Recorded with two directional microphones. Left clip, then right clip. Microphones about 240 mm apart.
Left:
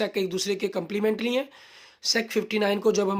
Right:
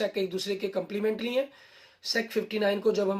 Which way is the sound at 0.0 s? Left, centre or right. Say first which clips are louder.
Left 3 dB; left.